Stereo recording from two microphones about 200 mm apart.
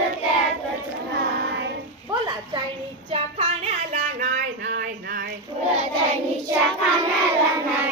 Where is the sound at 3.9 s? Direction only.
40° right (ahead or behind).